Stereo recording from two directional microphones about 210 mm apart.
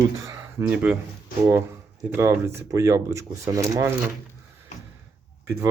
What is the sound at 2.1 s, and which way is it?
Speech, 15° right (ahead or behind).